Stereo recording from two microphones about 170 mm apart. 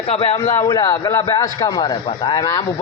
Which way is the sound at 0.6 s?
20° left (ahead or behind).